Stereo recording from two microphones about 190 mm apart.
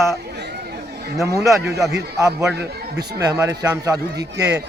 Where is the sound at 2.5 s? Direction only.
60° right (ahead or behind).